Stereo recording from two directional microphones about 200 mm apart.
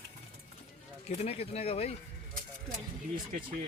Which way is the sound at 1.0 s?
30° left (ahead or behind).